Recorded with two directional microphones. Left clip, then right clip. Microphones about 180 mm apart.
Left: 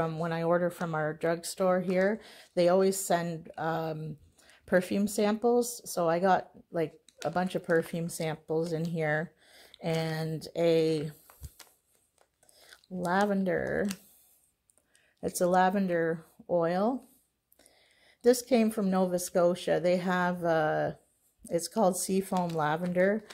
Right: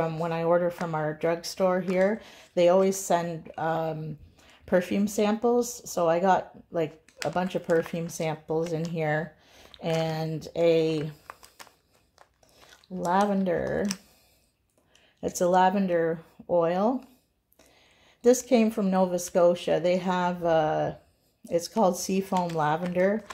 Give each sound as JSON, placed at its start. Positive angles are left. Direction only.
{"t": 0.0, "sound": "speech", "side_deg": 35}
{"t": 11.2, "sound": "a sound", "side_deg": 0}
{"t": 13.0, "sound": "speech", "side_deg": 35}
{"t": 15.1, "sound": "speech", "side_deg": 40}
{"t": 18.2, "sound": "speech", "side_deg": 40}